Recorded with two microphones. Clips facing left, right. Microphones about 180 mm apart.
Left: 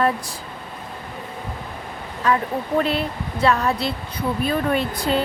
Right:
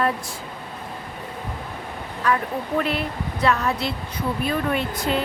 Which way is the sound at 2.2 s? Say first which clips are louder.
Left 2 dB; 20° left (ahead or behind).